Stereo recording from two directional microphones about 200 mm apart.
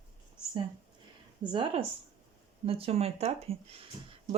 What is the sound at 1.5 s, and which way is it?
Speech, 25° right (ahead or behind).